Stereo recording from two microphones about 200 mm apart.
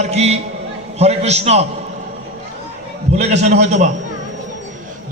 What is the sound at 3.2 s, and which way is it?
Speech, 35° right (ahead or behind).